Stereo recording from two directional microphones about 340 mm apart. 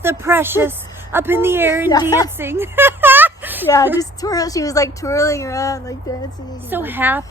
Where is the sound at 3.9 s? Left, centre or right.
Centre.